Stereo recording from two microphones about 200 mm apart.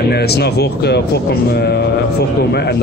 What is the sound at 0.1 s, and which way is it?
A man's voice, 55° left (ahead or behind).